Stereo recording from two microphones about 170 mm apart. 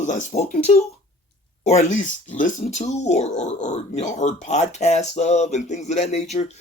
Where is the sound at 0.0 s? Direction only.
45° left (ahead or behind).